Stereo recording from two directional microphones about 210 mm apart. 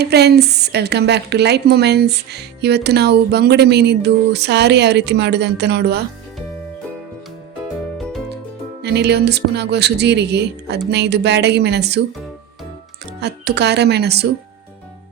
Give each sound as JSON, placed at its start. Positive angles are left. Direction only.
{"t": 0.0, "sound": "a woman's voice", "side_deg": -50}
{"t": 8.8, "sound": "a woman's voice", "side_deg": -50}
{"t": 13.1, "sound": "a woman's voice", "side_deg": -50}